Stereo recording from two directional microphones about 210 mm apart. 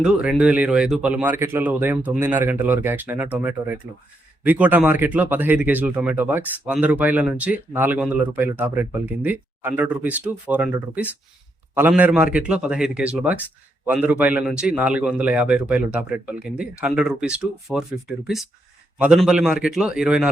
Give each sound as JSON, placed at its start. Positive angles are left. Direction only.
{"t": 0.0, "sound": "a man's voice", "side_deg": -5}
{"t": 18.9, "sound": "a man's voice", "side_deg": -5}